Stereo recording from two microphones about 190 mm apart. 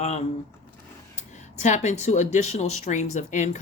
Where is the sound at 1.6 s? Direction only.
40° left (ahead or behind).